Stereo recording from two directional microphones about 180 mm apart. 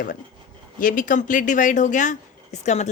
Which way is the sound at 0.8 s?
50° left (ahead or behind).